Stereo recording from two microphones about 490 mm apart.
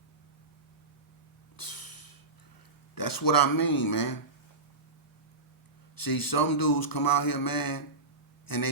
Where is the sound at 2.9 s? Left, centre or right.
Left.